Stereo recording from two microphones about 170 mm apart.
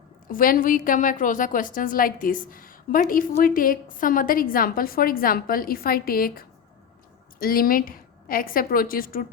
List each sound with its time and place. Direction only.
0.3 s a woman's voice: 55° left (ahead or behind)